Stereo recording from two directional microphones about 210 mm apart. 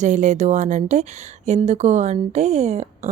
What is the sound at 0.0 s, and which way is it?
Speech, 35° right (ahead or behind).